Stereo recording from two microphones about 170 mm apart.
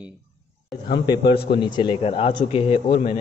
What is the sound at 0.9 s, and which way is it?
Speech, 25° left (ahead or behind).